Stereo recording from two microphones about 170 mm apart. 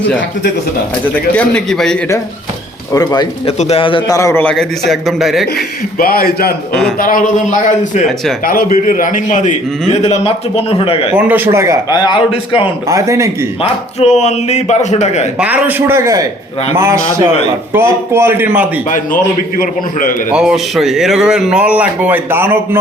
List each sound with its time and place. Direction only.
1.4 s speech: 5° left (ahead or behind)
2.9 s a man's voice: 20° left (ahead or behind)
3.6 s a man's voice: 35° left (ahead or behind); by 4.4 s 15° left (ahead or behind)
4.4 s speech: centre (ahead or behind)
6.0 s a man's voice: 60° left (ahead or behind); by 11.1 s 35° left (ahead or behind)
11.1 s a man's voice: 10° right (ahead or behind)
11.9 s a man's voice: 25° left (ahead or behind)
12.9 s a man's voice: 15° right (ahead or behind)
13.6 s a man's voice: 40° left (ahead or behind)
15.4 s a man's voice: 10° right (ahead or behind)
18.9 s a man's voice: 55° left (ahead or behind)
20.3 s speech: 5° right (ahead or behind)